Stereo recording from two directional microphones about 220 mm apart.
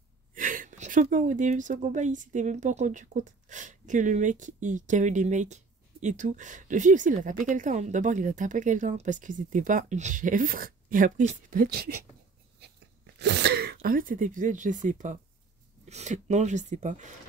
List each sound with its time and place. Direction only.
0.3 s a woman's voice: 35° right (ahead or behind)
12.5 s a sound: 50° right (ahead or behind)
15.8 s a woman's voice: 30° right (ahead or behind)